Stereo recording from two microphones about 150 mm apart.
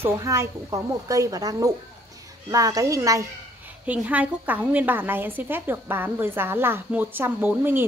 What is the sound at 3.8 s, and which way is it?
A woman's voice, 10° right (ahead or behind).